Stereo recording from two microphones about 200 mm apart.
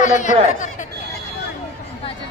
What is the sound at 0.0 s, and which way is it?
Speech, 40° left (ahead or behind).